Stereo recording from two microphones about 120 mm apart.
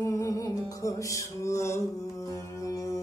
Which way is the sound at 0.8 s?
25° left (ahead or behind).